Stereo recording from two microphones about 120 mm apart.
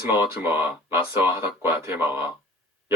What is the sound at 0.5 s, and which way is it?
Speech, 20° right (ahead or behind).